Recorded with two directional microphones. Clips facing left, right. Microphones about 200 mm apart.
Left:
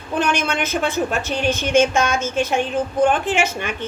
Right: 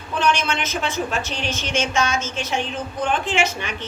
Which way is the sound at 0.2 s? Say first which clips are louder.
Left 1 dB; 55° left (ahead or behind).